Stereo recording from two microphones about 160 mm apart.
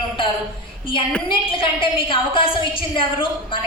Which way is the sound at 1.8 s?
35° left (ahead or behind).